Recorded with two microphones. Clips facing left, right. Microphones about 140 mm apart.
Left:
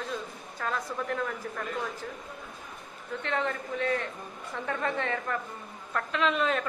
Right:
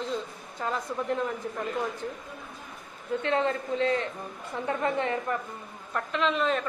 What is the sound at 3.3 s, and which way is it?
A woman's voice, 20° right (ahead or behind).